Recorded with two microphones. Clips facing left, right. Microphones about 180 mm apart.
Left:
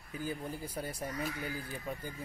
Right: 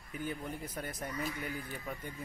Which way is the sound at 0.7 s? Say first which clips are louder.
Left 2 dB; 10° left (ahead or behind).